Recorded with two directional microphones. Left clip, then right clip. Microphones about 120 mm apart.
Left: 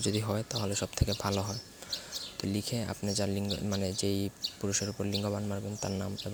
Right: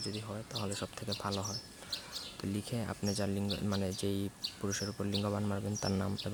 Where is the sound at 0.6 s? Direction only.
20° left (ahead or behind).